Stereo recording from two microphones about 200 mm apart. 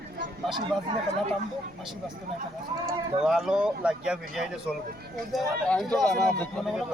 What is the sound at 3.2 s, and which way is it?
Speech, 5° right (ahead or behind).